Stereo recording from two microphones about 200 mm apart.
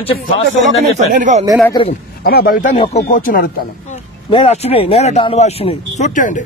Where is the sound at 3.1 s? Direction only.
45° left (ahead or behind).